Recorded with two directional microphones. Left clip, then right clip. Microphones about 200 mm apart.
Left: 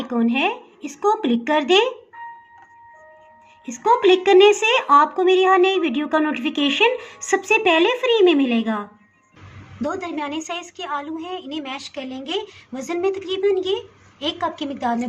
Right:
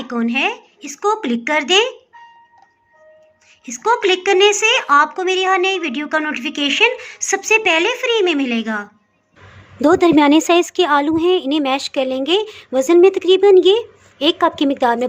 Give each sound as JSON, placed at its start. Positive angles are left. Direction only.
{"t": 0.0, "sound": "a woman's voice", "side_deg": 10}
{"t": 3.8, "sound": "a woman's voice", "side_deg": 5}
{"t": 9.8, "sound": "a woman's voice", "side_deg": -50}